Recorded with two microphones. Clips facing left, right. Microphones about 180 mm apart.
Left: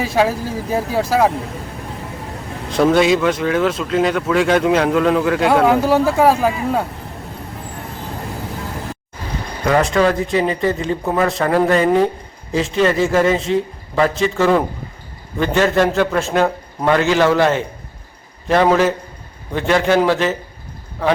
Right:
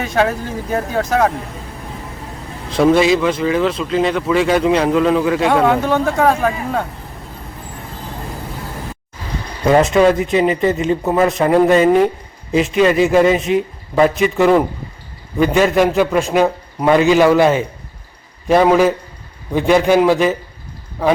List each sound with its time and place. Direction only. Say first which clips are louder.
0.0 s speech: even; 5° left (ahead or behind)
2.6 s speech: right 1 dB; centre (ahead or behind)
9.6 s a man's voice: right 4 dB; 20° right (ahead or behind)